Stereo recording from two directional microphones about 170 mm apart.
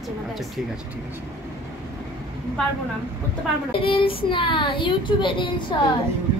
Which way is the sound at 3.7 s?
30° left (ahead or behind).